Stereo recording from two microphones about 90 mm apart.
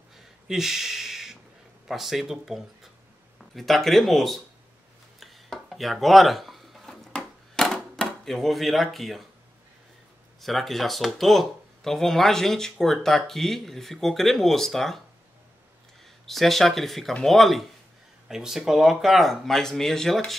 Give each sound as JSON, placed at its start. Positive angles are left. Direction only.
{"t": 0.5, "sound": "a sound", "side_deg": -5}
{"t": 1.9, "sound": "speech", "side_deg": 0}
{"t": 5.2, "sound": "a sound", "side_deg": 0}
{"t": 8.0, "sound": "speech", "side_deg": 0}
{"t": 10.4, "sound": "speech", "side_deg": 0}
{"t": 16.3, "sound": "speech", "side_deg": 0}